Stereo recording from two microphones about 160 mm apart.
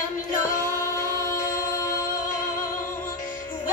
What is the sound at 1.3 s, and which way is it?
A capella, 60° left (ahead or behind).